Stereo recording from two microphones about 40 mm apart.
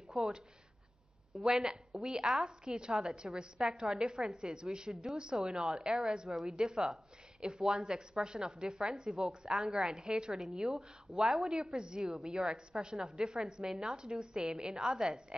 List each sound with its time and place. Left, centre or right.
0.2 s a woman's voice: centre
1.4 s a woman's voice: centre
9.2 s a woman's voice: right
9.5 s a woman's voice: centre
10.3 s a woman's voice: centre